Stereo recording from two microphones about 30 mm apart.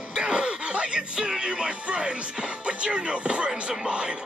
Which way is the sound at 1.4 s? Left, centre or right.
Right.